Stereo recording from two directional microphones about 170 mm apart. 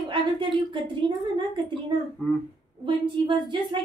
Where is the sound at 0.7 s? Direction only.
30° right (ahead or behind).